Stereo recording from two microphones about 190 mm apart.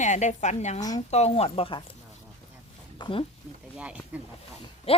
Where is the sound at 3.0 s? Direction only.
30° left (ahead or behind).